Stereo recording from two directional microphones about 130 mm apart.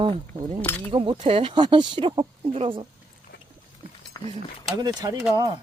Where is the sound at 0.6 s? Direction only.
15° left (ahead or behind).